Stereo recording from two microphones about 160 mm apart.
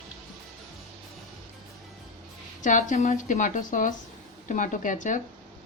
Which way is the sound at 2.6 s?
50° left (ahead or behind).